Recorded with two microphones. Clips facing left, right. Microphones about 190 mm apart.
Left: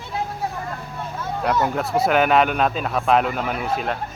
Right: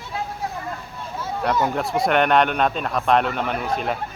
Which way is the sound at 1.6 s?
Centre (ahead or behind).